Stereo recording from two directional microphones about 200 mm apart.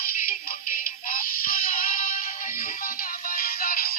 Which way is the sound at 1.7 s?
45° left (ahead or behind).